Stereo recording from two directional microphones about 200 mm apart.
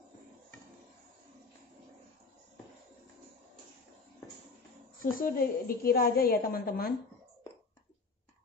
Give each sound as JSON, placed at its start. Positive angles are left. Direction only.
{"t": 5.1, "sound": "a woman's voice", "side_deg": 45}